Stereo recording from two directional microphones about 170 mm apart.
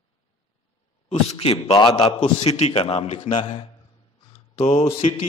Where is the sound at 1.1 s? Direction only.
40° left (ahead or behind).